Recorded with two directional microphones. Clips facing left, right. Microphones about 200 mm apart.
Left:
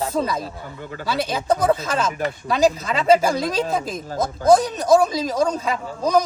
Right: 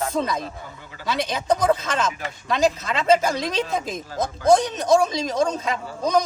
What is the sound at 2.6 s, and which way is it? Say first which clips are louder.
Speech: left 2 dB; 35° left (ahead or behind).